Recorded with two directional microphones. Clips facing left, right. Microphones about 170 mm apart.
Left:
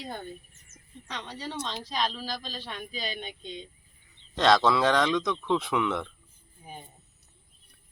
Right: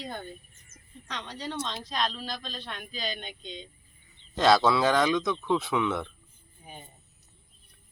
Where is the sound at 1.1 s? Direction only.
5° left (ahead or behind).